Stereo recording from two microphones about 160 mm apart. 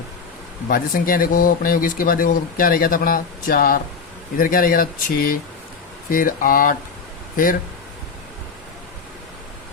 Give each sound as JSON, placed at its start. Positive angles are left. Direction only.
{"t": 0.7, "sound": "speech", "side_deg": 60}